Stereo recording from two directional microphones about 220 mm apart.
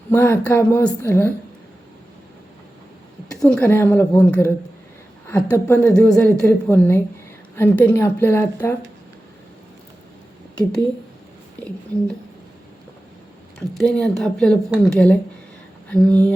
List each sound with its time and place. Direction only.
0.1 s a woman's voice: 10° left (ahead or behind)
3.4 s a woman's voice: 5° left (ahead or behind)
13.6 s a woman's voice: 5° left (ahead or behind)